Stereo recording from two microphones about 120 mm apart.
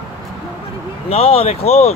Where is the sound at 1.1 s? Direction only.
55° left (ahead or behind).